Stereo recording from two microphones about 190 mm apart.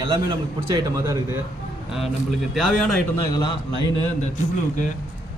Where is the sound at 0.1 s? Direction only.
25° right (ahead or behind).